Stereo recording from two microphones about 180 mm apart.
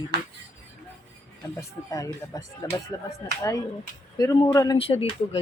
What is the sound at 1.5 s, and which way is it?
Speech, 20° left (ahead or behind).